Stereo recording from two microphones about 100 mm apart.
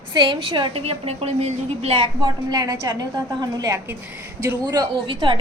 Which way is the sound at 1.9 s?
50° right (ahead or behind).